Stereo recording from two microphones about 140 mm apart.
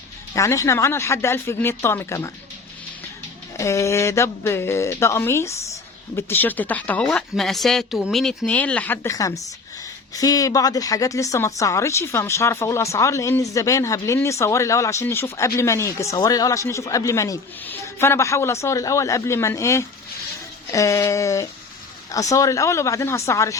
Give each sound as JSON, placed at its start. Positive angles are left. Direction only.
{"t": 0.3, "sound": "speech", "side_deg": 20}
{"t": 3.6, "sound": "speech", "side_deg": 20}
{"t": 9.0, "sound": "speech", "side_deg": 25}